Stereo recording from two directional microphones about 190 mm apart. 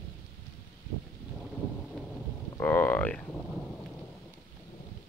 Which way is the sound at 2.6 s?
10° left (ahead or behind).